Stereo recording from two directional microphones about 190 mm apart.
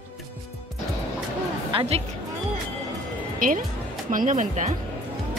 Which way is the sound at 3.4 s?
45° right (ahead or behind).